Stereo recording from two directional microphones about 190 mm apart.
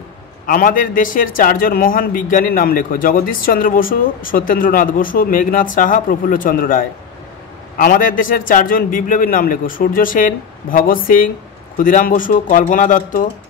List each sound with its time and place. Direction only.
0.5 s a man's voice: 45° left (ahead or behind)